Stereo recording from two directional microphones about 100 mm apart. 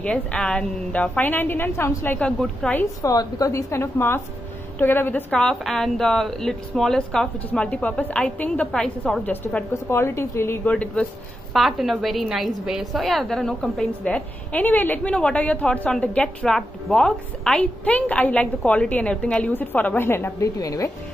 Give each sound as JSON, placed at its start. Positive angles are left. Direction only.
{"t": 0.0, "sound": "a woman's voice", "side_deg": 10}
{"t": 2.1, "sound": "a woman's voice", "side_deg": 5}
{"t": 3.0, "sound": "a woman's voice", "side_deg": 35}
{"t": 5.4, "sound": "a woman's voice", "side_deg": 5}
{"t": 9.8, "sound": "a woman's voice", "side_deg": 25}
{"t": 10.7, "sound": "a woman's voice", "side_deg": 10}
{"t": 11.5, "sound": "a woman's voice", "side_deg": 0}